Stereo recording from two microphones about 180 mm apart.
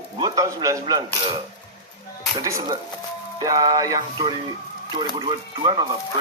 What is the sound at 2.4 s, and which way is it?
Speech, 20° right (ahead or behind).